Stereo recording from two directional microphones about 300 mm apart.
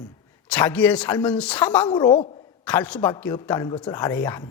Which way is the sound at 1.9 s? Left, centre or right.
Centre.